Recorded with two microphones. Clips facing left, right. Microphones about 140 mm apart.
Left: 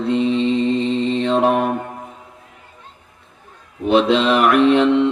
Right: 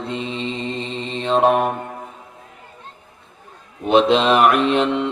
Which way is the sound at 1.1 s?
20° right (ahead or behind).